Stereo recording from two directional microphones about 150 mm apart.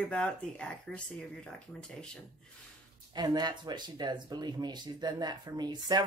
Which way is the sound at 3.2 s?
30° right (ahead or behind).